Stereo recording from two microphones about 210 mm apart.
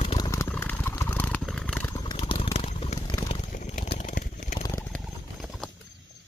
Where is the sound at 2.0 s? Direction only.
20° left (ahead or behind).